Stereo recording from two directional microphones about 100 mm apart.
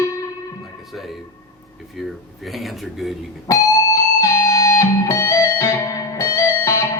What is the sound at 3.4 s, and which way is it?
Music, 35° left (ahead or behind).